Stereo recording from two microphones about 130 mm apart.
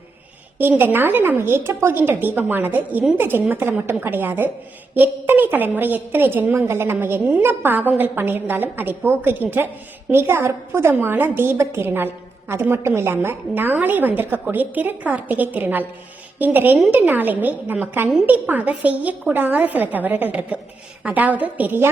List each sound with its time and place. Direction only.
0.6 s a woman's voice: 15° right (ahead or behind)